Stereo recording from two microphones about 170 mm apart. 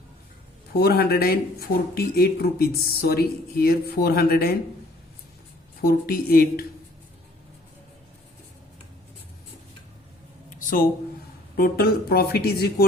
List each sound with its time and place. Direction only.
0.8 s speech: 65° left (ahead or behind)
5.8 s speech: 65° left (ahead or behind)
10.6 s a sound: 50° left (ahead or behind)
11.5 s speech: 65° left (ahead or behind)